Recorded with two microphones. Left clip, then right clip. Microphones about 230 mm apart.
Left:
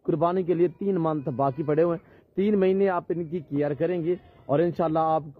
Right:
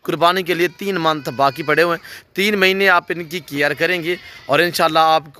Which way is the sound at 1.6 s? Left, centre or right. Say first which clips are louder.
Right 8 dB; centre.